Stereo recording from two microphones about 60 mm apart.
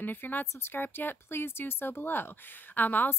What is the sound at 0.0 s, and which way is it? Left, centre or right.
Speech, left.